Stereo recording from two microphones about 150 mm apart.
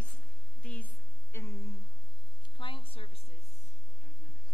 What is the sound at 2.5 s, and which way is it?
Speech, 35° left (ahead or behind).